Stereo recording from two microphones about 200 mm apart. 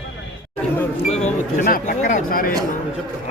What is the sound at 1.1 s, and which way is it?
Speech, 35° left (ahead or behind).